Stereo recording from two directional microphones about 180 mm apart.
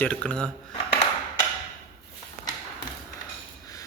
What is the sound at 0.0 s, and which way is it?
Speech, 5° left (ahead or behind).